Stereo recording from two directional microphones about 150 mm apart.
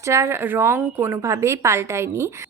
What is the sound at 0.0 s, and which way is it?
A woman's voice, 20° right (ahead or behind).